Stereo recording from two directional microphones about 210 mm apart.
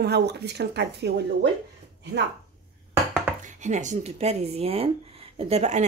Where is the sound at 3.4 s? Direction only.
35° right (ahead or behind).